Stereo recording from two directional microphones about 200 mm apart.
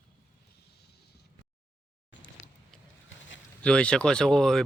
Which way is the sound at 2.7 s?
5° left (ahead or behind).